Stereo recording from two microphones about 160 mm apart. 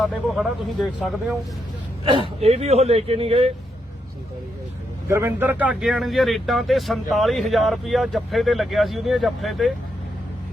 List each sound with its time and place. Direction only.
0.0 s speech: centre (ahead or behind)
2.0 s speech: 30° right (ahead or behind)
5.0 s speech: 15° right (ahead or behind); by 9.7 s centre (ahead or behind)